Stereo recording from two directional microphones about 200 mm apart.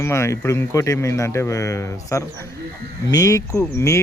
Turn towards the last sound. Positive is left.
turn(degrees=15)  # may be behind; listen again after turning